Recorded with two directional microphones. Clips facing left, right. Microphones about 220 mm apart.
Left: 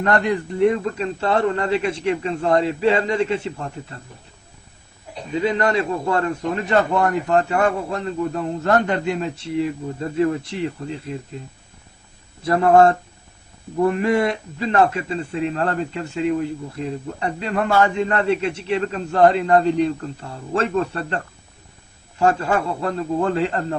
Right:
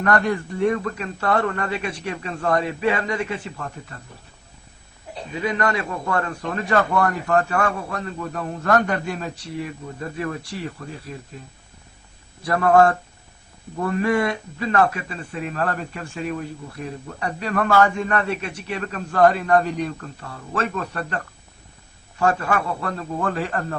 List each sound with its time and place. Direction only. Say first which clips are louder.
0.0 s a man's voice: left 1 dB; 20° left (ahead or behind)
5.4 s a man's voice: left 4 dB; 25° left (ahead or behind)
12.4 s a man's voice: left 2 dB; 25° left (ahead or behind)
22.2 s a man's voice: left 3 dB; 25° left (ahead or behind)